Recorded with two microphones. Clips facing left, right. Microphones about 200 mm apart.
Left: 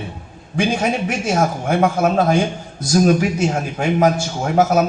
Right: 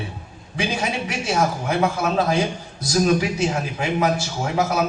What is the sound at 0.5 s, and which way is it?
A man's voice, 50° left (ahead or behind).